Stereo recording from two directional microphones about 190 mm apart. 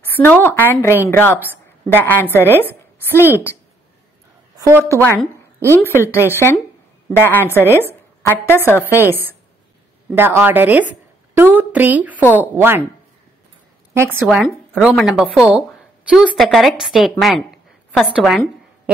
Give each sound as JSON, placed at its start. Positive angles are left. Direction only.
{"t": 0.0, "sound": "a woman's voice", "side_deg": 10}
{"t": 4.6, "sound": "a woman's voice", "side_deg": -15}
{"t": 5.0, "sound": "a woman's voice", "side_deg": 10}
{"t": 10.1, "sound": "a woman's voice", "side_deg": -10}
{"t": 13.9, "sound": "speech", "side_deg": -10}